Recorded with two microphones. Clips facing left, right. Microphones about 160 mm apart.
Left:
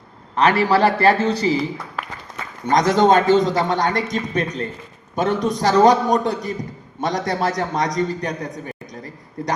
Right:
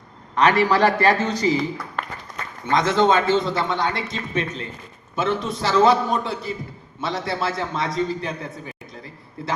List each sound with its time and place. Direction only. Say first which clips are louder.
0.3 s a man's voice: left 1 dB; 30° left (ahead or behind)
2.0 s applause: right 1 dB; 5° left (ahead or behind)
2.6 s a man's voice: left 3 dB; 40° left (ahead or behind)